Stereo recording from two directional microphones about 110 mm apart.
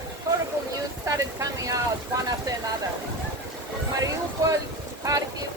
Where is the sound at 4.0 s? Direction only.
30° right (ahead or behind).